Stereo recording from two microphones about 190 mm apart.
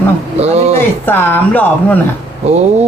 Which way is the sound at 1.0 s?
10° left (ahead or behind).